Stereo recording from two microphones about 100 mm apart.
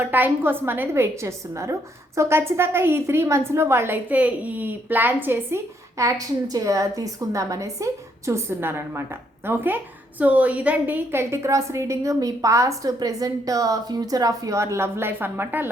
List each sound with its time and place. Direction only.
0.0 s a woman's voice: 20° right (ahead or behind)
6.0 s a woman's voice: 35° right (ahead or behind)